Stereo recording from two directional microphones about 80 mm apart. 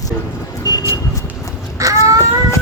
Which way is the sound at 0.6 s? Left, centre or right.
Left.